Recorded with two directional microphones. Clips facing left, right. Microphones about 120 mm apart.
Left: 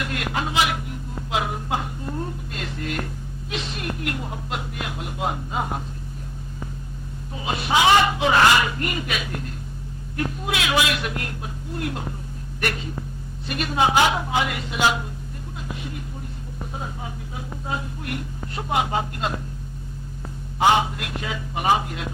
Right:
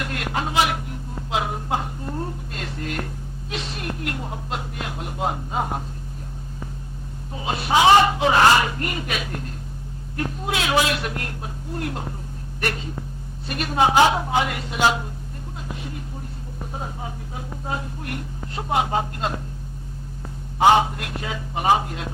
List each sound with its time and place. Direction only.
0.0 s speech: 40° right (ahead or behind)
1.3 s speech: 30° right (ahead or behind)
7.3 s speech: 35° right (ahead or behind)
12.5 s a sound: 35° right (ahead or behind)
13.5 s speech: 40° right (ahead or behind)
16.7 s speech: 35° right (ahead or behind)
20.6 s speech: 40° right (ahead or behind)